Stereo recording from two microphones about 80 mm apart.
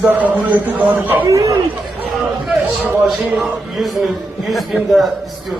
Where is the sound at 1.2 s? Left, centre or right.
Right.